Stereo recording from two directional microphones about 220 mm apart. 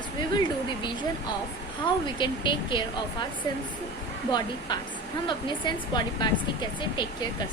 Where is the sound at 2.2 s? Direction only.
20° left (ahead or behind).